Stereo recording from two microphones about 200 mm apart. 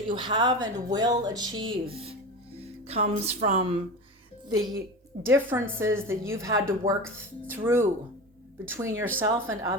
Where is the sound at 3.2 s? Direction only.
35° right (ahead or behind).